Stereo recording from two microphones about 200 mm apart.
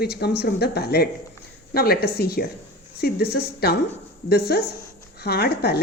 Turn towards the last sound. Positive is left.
turn(degrees=55)  # may be behind; listen again after turning